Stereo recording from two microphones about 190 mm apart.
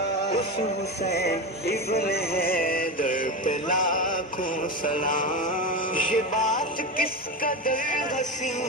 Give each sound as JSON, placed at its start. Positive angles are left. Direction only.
{"t": 1.1, "sound": "music", "side_deg": 55}
{"t": 5.0, "sound": "mantra", "side_deg": 45}
{"t": 5.9, "sound": "music", "side_deg": 45}